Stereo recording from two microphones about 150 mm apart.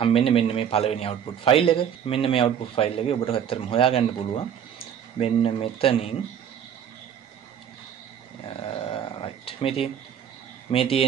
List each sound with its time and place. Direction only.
0.0 s a man's voice: 40° left (ahead or behind)
8.9 s a sound: 40° left (ahead or behind)
10.7 s a man's voice: 40° left (ahead or behind)